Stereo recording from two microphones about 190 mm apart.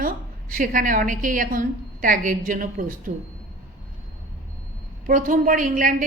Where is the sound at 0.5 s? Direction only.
45° right (ahead or behind).